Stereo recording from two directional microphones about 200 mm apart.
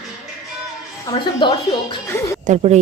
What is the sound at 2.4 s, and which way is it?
Speech, 35° right (ahead or behind).